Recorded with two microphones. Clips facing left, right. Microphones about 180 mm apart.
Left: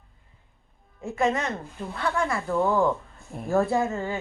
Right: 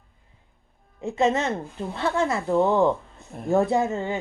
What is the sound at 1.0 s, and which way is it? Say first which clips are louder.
Speech: right 3 dB; 20° right (ahead or behind).